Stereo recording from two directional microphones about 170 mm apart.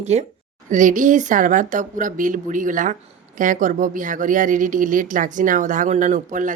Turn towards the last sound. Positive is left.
turn(degrees=-45)  # may be behind; listen again after turning